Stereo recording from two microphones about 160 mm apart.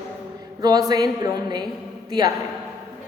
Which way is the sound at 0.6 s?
25° right (ahead or behind).